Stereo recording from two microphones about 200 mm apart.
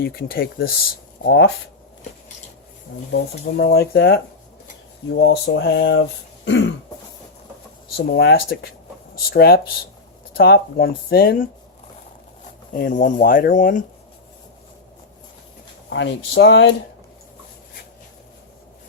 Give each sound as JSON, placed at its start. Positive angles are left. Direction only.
{"t": 0.0, "sound": "speech", "side_deg": 50}
{"t": 1.2, "sound": "speech", "side_deg": 60}
{"t": 3.1, "sound": "speech", "side_deg": 55}
{"t": 7.9, "sound": "speech", "side_deg": 55}
{"t": 12.7, "sound": "speech", "side_deg": 45}
{"t": 15.9, "sound": "speech", "side_deg": 65}